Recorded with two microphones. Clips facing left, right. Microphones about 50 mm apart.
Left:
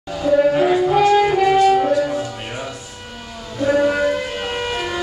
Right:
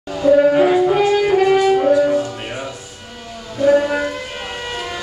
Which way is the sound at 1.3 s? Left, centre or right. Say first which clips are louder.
Even; centre.